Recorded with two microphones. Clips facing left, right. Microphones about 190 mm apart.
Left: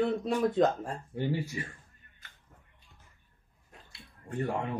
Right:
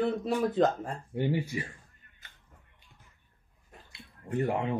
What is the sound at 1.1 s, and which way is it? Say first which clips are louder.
Speech: right 3 dB; 20° right (ahead or behind).